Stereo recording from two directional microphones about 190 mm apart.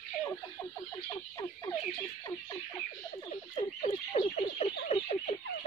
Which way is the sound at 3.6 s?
35° left (ahead or behind).